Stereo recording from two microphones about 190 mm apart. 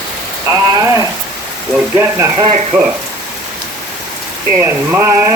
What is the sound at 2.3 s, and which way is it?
Rain on surface, 30° right (ahead or behind).